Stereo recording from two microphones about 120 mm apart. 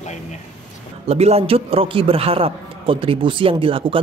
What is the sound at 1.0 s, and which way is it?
Speech, 60° right (ahead or behind).